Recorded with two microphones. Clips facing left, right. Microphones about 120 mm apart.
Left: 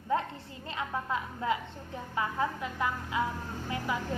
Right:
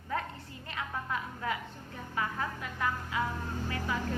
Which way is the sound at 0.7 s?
25° left (ahead or behind).